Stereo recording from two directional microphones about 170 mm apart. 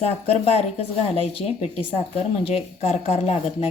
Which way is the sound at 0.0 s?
35° left (ahead or behind).